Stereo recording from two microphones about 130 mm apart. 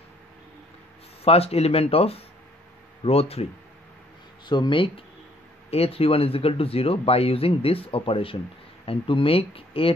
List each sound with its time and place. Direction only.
1.2 s speech: 50° left (ahead or behind)
4.5 s speech: 35° left (ahead or behind)